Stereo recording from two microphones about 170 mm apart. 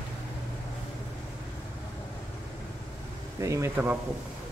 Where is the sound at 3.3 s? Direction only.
15° right (ahead or behind).